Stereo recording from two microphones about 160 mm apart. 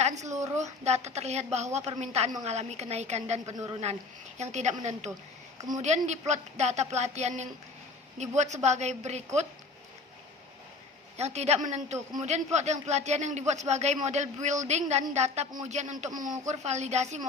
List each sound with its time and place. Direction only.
0.2 s a man's voice: 45° right (ahead or behind)
5.5 s a woman's voice: 25° right (ahead or behind)
5.8 s a man's voice: 45° right (ahead or behind)
11.2 s a woman's voice: 40° right (ahead or behind)